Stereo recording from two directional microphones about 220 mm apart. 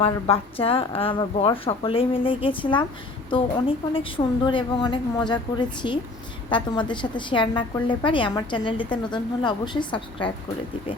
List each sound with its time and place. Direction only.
0.0 s a woman's voice: 25° left (ahead or behind)